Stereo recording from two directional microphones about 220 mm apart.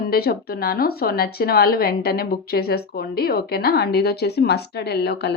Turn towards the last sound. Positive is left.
turn(degrees=50)  # may be behind; listen again after turning